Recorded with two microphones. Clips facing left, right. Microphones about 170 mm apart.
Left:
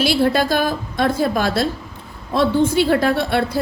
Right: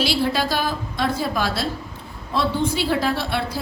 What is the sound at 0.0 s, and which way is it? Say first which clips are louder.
A woman's voice: left 5 dB; 50° left (ahead or behind).